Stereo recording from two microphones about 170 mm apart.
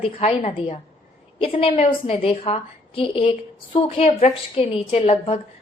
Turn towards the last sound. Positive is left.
turn(degrees=35)  # may be behind; listen again after turning